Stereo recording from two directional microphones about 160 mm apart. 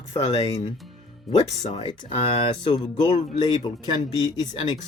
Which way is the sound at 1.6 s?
40° left (ahead or behind).